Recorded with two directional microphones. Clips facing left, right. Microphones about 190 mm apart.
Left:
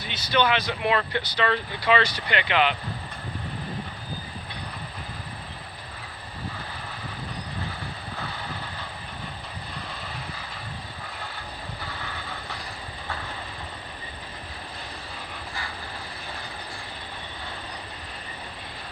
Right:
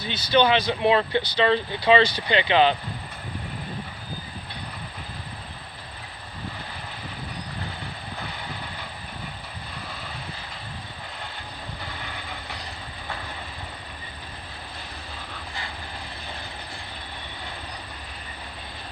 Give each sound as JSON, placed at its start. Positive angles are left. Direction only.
{"t": 0.1, "sound": "speech", "side_deg": -30}